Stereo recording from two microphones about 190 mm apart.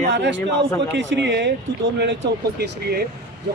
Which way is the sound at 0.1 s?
70° right (ahead or behind).